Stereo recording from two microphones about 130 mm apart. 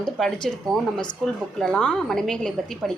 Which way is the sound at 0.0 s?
5° left (ahead or behind).